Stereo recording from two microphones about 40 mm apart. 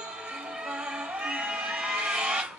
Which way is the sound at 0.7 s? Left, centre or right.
Right.